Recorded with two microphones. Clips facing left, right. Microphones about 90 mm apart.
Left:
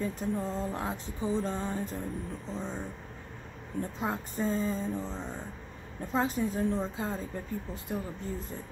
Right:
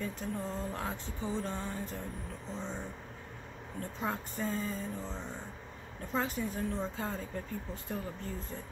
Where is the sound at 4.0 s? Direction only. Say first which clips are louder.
Left 2 dB; 20° left (ahead or behind).